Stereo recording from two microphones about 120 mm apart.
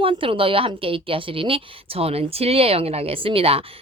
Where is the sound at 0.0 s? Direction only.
45° right (ahead or behind).